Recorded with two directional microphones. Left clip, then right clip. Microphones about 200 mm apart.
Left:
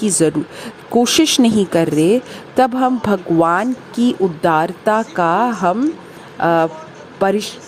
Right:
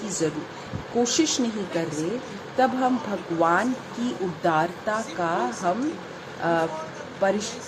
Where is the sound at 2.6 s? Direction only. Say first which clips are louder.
Left 8 dB; 55° left (ahead or behind).